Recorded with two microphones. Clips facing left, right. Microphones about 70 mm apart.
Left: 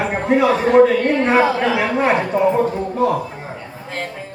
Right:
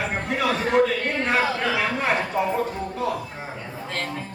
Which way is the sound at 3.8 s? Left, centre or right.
Centre.